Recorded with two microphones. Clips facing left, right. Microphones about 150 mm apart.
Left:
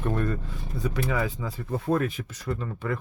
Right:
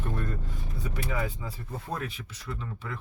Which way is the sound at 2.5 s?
55° left (ahead or behind).